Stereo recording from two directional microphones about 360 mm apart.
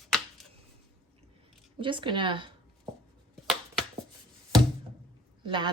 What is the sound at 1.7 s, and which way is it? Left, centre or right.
Speech, centre.